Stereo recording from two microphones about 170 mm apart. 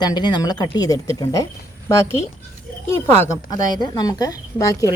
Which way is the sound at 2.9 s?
15° left (ahead or behind).